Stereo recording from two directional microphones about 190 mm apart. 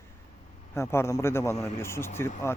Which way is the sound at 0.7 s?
15° left (ahead or behind).